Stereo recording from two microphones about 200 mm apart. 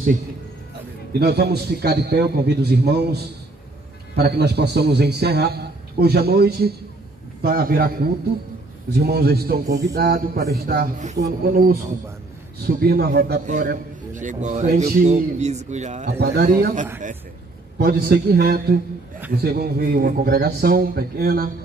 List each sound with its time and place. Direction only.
1.2 s a man's voice: 55° right (ahead or behind); by 16.1 s 35° right (ahead or behind)
16.2 s a man's voice: 50° right (ahead or behind)